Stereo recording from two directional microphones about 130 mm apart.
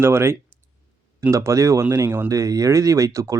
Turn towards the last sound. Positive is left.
turn(degrees=-25)  # may be behind; listen again after turning